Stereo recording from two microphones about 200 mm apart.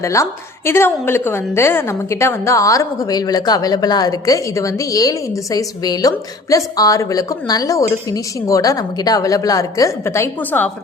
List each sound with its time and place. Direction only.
0.0 s a woman's voice: 15° left (ahead or behind)